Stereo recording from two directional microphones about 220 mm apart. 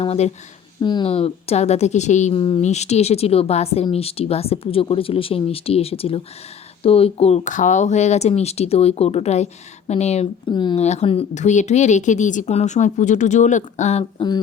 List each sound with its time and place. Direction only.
0.0 s a woman's voice: 25° left (ahead or behind)